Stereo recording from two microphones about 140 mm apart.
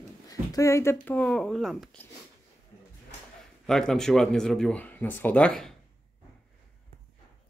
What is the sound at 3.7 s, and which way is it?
Speech, 5° left (ahead or behind).